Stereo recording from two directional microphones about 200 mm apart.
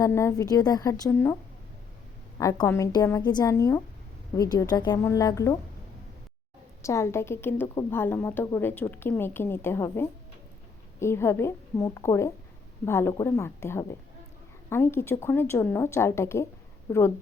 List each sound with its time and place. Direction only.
0.0 s a woman's voice: 15° left (ahead or behind)
2.4 s a woman's voice: 15° left (ahead or behind)
6.8 s a woman's voice: 15° left (ahead or behind)